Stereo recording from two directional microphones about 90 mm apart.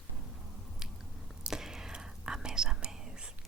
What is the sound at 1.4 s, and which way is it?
Whispering, 5° right (ahead or behind).